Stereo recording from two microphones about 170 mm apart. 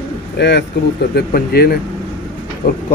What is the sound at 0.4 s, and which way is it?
Speech, 85° left.